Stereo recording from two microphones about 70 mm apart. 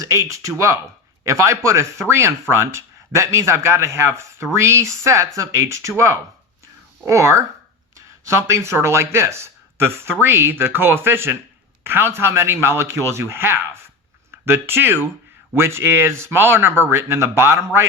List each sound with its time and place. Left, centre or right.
0.0 s speech: right
7.0 s speech: right